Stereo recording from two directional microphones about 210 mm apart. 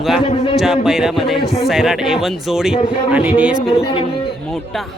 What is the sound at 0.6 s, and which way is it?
Speech, centre (ahead or behind).